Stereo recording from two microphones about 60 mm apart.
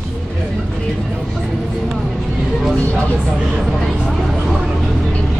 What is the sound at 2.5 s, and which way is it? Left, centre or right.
Vehicle, centre.